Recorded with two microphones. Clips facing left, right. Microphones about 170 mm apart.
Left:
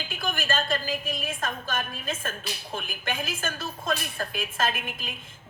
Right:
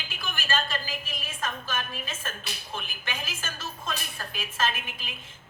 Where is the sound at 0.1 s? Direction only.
50° left (ahead or behind).